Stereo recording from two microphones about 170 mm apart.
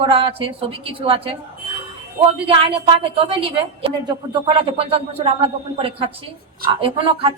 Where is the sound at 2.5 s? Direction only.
35° right (ahead or behind).